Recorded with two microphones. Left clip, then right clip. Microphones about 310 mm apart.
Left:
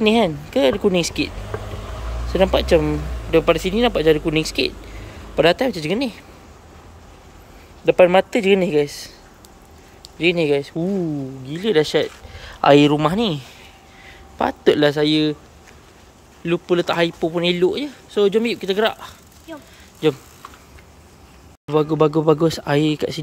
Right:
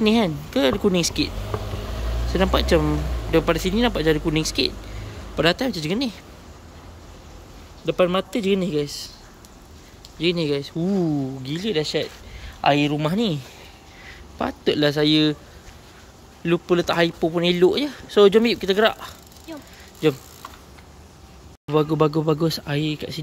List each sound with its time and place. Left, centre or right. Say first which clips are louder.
0.0 s speech: left 4 dB; centre
1.5 s a sound: even; right
2.3 s speech: left 4 dB; centre
7.8 s speech: left 8 dB; centre
10.1 s speech: left 5 dB; centre
11.7 s speech: left 7 dB; centre
16.4 s speech: left 1 dB; centre
21.6 s speech: left 3 dB; centre